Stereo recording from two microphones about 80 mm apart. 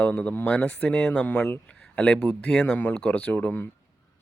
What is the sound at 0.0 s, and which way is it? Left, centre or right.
Speech, centre.